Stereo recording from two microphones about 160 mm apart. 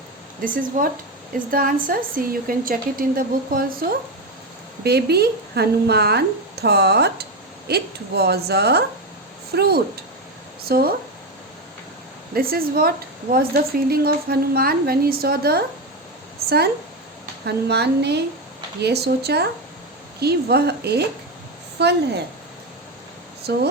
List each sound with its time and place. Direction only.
0.4 s a woman's voice: 60° right (ahead or behind)
4.8 s speech: 90° right
9.6 s a woman's voice: 80° right
12.3 s a woman's voice: 70° right (ahead or behind)
17.4 s speech: 90° right
23.5 s speech: 90° right